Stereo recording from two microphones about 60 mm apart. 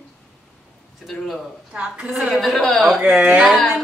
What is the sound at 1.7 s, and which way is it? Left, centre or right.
Speech, centre.